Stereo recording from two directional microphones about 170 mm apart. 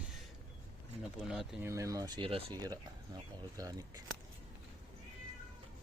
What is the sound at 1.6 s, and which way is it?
Speech, 15° right (ahead or behind).